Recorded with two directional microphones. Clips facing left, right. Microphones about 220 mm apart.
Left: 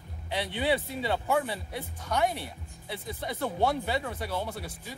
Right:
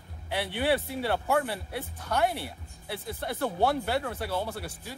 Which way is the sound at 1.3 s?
5° right (ahead or behind).